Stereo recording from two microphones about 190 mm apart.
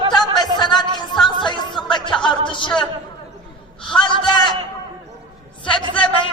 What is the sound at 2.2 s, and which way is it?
Music, 25° left (ahead or behind).